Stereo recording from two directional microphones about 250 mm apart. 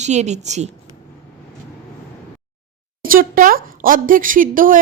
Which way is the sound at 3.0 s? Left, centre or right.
Right.